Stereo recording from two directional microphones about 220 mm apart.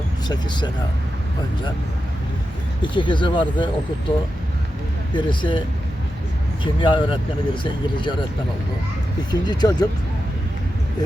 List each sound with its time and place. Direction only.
0.3 s speech: 20° left (ahead or behind)
2.8 s speech: 20° left (ahead or behind)
5.1 s speech: 20° left (ahead or behind)
6.7 s speech: 20° left (ahead or behind)
9.3 s speech: 20° left (ahead or behind)